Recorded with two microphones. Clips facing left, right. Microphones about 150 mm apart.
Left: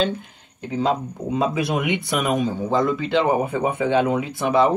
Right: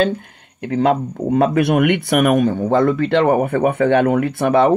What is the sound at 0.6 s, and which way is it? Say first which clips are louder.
Speech: right 6 dB; 70° right (ahead or behind).